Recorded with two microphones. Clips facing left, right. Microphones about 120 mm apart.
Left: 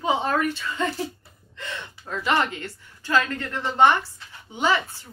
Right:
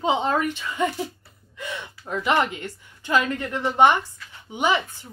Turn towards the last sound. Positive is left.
turn(degrees=-15)  # may be behind; listen again after turning